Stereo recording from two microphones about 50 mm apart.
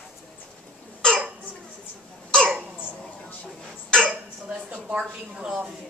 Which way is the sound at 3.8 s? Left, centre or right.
Centre.